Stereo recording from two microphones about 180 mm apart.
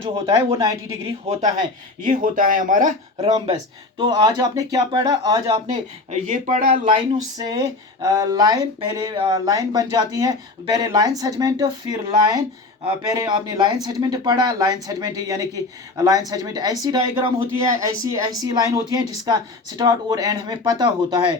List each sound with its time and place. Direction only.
0.0 s speech: 30° right (ahead or behind)
0.5 s speech: 15° right (ahead or behind)
2.0 s speech: 50° right (ahead or behind)
3.2 s speech: 35° right (ahead or behind)
3.5 s speech: 25° right (ahead or behind)
5.7 s speech: 45° right (ahead or behind)
6.8 s speech: 25° right (ahead or behind)